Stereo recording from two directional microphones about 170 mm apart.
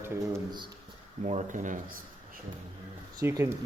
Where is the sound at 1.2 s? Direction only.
45° right (ahead or behind).